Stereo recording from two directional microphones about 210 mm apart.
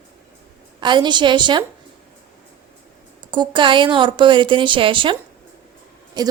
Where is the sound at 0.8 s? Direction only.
20° right (ahead or behind).